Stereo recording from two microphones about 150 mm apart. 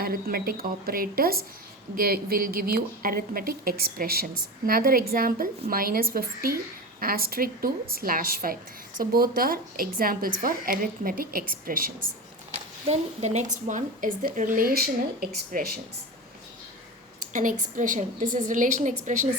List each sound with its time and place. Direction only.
0.0 s a woman's voice: 80° right
12.9 s a woman's voice: 50° right (ahead or behind); by 15.7 s 80° right
17.3 s a woman's voice: 60° right (ahead or behind)